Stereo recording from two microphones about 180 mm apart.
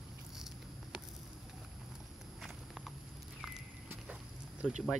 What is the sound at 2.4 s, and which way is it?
Walk, centre (ahead or behind).